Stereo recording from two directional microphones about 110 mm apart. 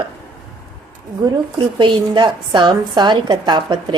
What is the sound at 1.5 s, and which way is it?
A woman's voice, 50° right (ahead or behind).